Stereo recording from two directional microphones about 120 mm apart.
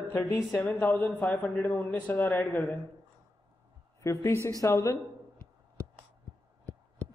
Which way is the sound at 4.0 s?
25° left (ahead or behind).